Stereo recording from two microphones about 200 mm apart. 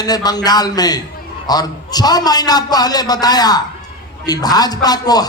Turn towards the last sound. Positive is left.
turn(degrees=20)  # may be behind; listen again after turning